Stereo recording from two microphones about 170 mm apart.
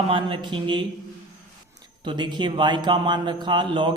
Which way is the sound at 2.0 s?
25° right (ahead or behind).